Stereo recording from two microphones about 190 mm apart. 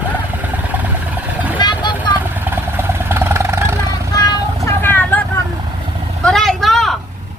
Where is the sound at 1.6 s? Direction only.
25° left (ahead or behind).